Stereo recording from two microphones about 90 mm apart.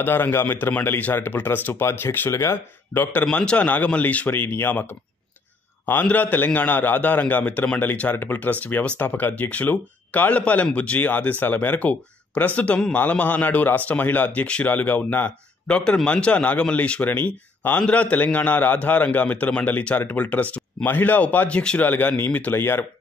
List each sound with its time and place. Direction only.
0.0 s a man's voice: 25° left (ahead or behind)